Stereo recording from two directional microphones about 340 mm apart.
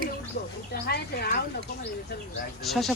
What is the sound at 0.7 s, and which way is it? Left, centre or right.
Speech, left.